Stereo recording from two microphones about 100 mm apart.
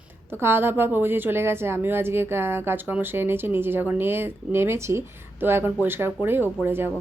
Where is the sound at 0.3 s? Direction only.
25° right (ahead or behind).